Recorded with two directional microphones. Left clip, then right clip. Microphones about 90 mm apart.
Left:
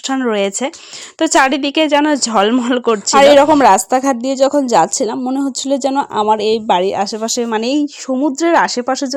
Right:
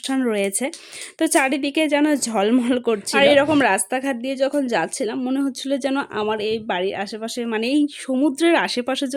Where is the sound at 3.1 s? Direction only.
55° left (ahead or behind); by 6.2 s 35° left (ahead or behind).